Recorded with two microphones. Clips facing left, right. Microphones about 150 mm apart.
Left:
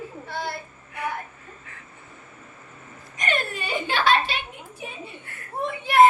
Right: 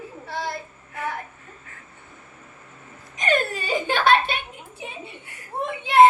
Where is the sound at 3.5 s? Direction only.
40° right (ahead or behind).